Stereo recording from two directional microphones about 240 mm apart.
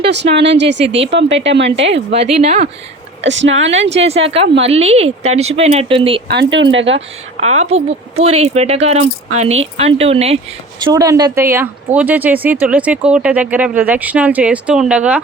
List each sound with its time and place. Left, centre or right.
0.0 s speech: right
2.4 s speech: right
3.2 s speech: right
3.8 s speech: right
6.2 s speech: right
7.5 s speech: right; by 15.2 s centre